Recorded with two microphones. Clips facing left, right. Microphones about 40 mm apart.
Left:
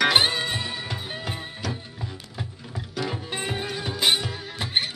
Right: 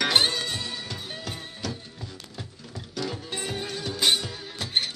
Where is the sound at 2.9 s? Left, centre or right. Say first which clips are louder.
Left 2 dB; left.